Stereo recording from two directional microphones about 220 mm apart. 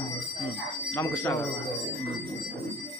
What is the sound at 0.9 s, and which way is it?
Speech, 10° left (ahead or behind).